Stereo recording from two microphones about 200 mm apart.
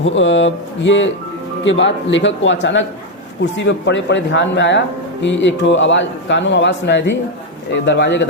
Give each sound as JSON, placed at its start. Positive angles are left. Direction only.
{"t": 0.0, "sound": "a man's voice", "side_deg": 70}